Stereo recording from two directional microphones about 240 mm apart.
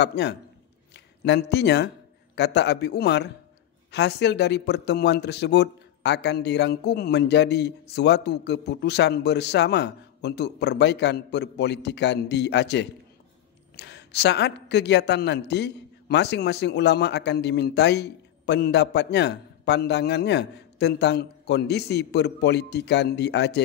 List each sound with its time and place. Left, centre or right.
0.0 s speech: left